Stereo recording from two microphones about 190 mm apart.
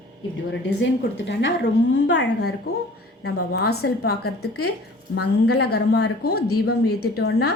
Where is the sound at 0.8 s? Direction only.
70° left (ahead or behind).